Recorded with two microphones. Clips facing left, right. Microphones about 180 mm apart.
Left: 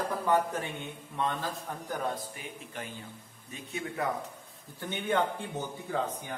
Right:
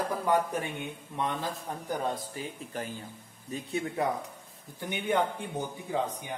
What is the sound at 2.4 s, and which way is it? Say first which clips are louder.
Speech: right 5 dB; 35° right (ahead or behind).